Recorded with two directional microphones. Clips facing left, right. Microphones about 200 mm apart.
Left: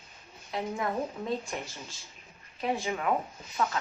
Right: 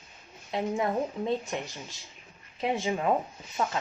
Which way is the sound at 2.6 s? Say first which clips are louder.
Right 2 dB; 25° right (ahead or behind).